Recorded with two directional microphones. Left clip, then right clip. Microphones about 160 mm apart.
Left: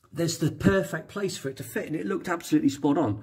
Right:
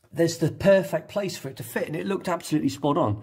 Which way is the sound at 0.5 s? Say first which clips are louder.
Right 8 dB; 20° right (ahead or behind).